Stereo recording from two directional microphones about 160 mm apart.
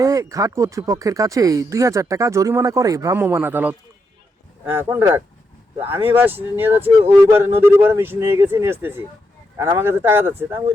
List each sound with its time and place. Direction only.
0.0 s speech: 20° right (ahead or behind)